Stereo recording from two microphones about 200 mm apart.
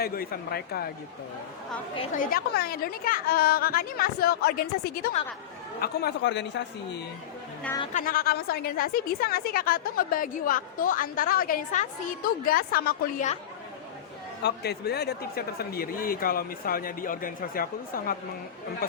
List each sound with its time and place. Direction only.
0.0 s a woman's voice: 50° left (ahead or behind)
2.1 s a woman's voice: 50° left (ahead or behind)
7.9 s a woman's voice: 45° left (ahead or behind)
14.4 s a woman's voice: 55° left (ahead or behind)